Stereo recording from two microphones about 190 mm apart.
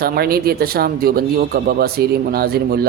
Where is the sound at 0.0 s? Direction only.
55° right (ahead or behind).